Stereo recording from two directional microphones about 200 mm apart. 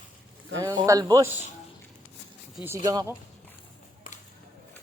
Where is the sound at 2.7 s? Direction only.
15° right (ahead or behind).